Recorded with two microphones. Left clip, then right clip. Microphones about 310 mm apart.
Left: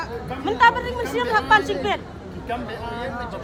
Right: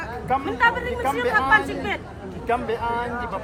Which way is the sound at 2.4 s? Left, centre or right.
Right.